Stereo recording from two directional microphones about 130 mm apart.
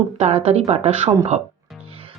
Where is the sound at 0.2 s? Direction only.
55° right (ahead or behind).